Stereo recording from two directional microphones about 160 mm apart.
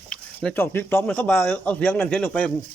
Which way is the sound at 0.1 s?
5° left (ahead or behind).